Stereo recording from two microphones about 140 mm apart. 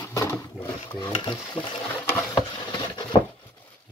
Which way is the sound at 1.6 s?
35° left (ahead or behind).